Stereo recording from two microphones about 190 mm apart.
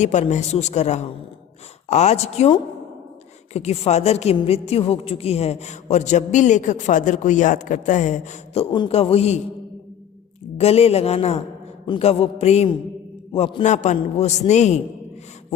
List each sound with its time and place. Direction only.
0.0 s a woman's voice: 40° left (ahead or behind)
10.6 s a woman's voice: 35° left (ahead or behind)